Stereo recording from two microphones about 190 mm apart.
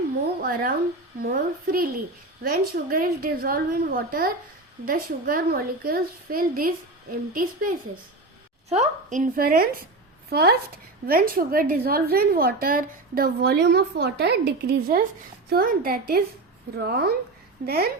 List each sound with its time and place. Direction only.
1.2 s a woman's voice: 50° right (ahead or behind)